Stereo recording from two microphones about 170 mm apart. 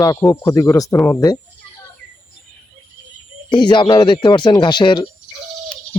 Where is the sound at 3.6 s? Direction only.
25° left (ahead or behind).